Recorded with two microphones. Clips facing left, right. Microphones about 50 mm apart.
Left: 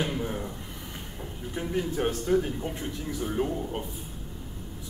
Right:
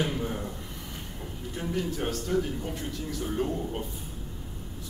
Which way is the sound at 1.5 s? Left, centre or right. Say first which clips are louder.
Left 2 dB; centre.